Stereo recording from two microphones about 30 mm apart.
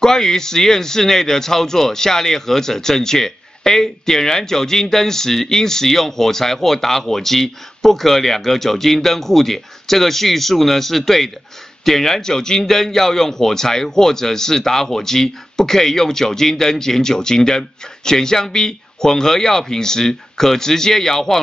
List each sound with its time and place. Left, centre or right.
0.0 s speech: centre